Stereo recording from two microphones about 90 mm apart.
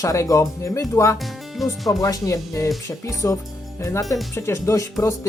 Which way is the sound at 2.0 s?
40° left (ahead or behind).